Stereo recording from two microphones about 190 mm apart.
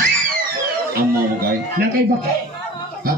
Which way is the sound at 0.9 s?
50° right (ahead or behind).